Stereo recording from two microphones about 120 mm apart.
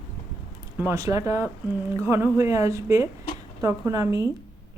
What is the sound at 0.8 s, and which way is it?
A woman's voice, 25° right (ahead or behind).